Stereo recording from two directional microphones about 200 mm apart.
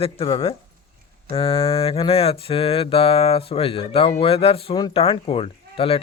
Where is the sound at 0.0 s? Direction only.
25° left (ahead or behind).